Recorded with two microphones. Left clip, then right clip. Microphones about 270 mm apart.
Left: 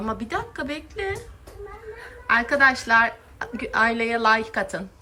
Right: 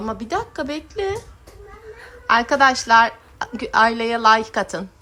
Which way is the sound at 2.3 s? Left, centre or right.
Centre.